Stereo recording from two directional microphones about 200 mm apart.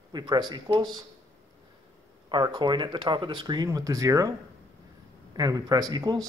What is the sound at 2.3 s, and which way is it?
Speech, 20° right (ahead or behind).